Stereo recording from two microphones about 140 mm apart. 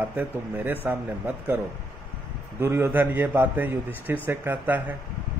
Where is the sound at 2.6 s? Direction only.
15° right (ahead or behind).